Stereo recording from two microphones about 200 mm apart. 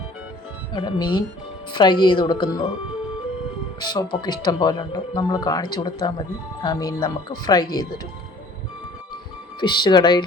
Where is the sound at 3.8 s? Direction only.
20° left (ahead or behind).